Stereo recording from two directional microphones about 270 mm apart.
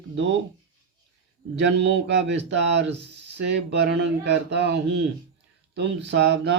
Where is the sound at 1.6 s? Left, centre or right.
Right.